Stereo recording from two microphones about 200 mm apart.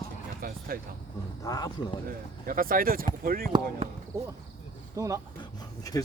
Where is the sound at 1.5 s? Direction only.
20° left (ahead or behind).